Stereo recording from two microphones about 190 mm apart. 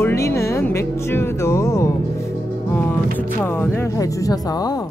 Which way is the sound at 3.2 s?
10° left (ahead or behind).